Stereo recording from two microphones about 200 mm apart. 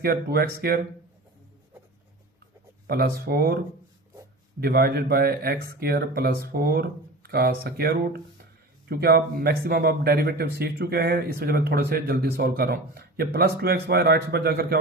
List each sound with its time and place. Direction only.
0.0 s speech: 50° right (ahead or behind)
2.8 s speech: 50° right (ahead or behind)
4.6 s speech: 50° right (ahead or behind)